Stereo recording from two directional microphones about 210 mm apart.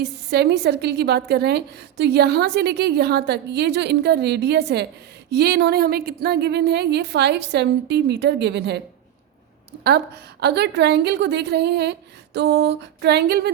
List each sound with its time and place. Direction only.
0.0 s a woman's voice: 50° right (ahead or behind)
9.8 s a woman's voice: 50° right (ahead or behind)